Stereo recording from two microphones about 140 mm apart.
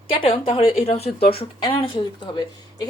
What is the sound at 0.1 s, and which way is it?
A woman's voice, 40° left (ahead or behind).